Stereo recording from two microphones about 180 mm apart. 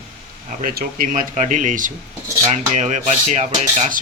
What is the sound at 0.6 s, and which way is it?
Speech, 50° right (ahead or behind).